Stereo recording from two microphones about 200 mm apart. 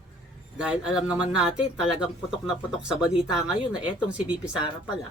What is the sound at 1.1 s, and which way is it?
A woman's voice, 5° right (ahead or behind).